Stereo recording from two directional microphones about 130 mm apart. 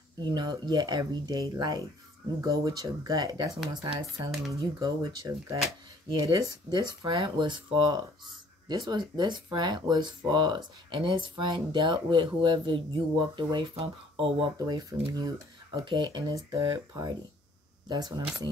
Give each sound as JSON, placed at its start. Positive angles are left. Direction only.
{"t": 0.2, "sound": "speech", "side_deg": -35}